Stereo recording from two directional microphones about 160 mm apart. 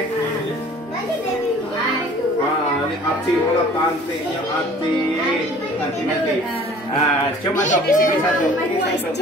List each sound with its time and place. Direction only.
7.6 s speech: 55° left (ahead or behind)